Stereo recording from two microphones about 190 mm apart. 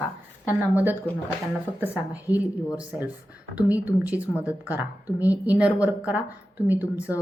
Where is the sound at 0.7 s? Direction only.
10° right (ahead or behind).